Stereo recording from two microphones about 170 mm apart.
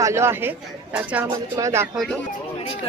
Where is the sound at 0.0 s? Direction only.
15° right (ahead or behind).